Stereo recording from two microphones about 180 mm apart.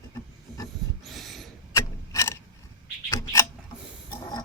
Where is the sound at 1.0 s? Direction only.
Centre (ahead or behind).